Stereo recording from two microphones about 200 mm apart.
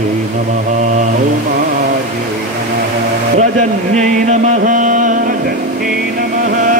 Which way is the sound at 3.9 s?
35° right (ahead or behind).